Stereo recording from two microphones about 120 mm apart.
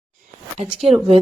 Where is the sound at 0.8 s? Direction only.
55° right (ahead or behind).